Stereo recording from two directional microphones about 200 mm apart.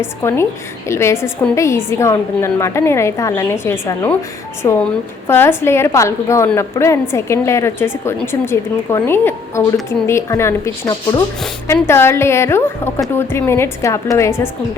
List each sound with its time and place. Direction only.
0.0 s a woman's voice: 15° left (ahead or behind)
5.3 s a woman's voice: 10° left (ahead or behind)